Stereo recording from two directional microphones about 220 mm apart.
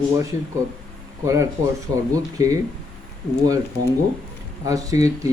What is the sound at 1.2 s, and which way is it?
Speech, 15° right (ahead or behind).